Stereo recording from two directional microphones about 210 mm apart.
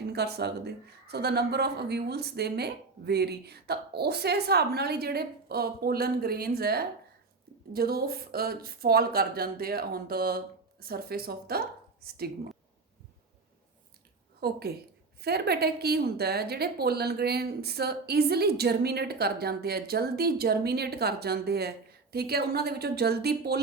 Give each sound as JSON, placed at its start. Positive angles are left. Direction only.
{"t": 0.1, "sound": "a woman's voice", "side_deg": -50}
{"t": 14.4, "sound": "a woman's voice", "side_deg": -50}